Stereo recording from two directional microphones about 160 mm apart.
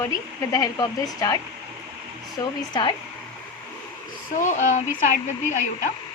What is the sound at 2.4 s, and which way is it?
Speech, 25° left (ahead or behind).